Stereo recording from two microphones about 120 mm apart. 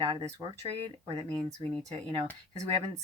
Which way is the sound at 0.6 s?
55° right (ahead or behind).